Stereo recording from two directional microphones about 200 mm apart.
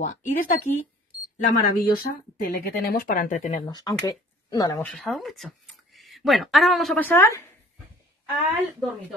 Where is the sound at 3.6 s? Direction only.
20° left (ahead or behind).